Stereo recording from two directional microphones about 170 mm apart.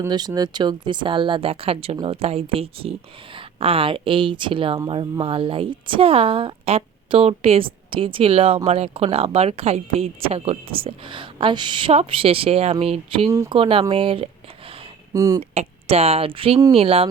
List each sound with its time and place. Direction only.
0.0 s a woman's voice: 25° right (ahead or behind)
15.1 s speech: 20° right (ahead or behind)
15.4 s a woman's voice: 35° right (ahead or behind)